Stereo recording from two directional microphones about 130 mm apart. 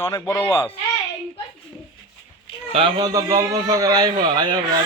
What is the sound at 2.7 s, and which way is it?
A man's voice, 35° right (ahead or behind).